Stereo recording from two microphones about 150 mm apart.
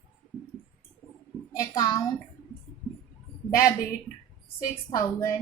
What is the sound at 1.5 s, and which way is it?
Speech, 25° left (ahead or behind).